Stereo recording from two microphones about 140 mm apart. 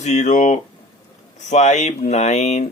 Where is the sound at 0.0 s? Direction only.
55° left (ahead or behind).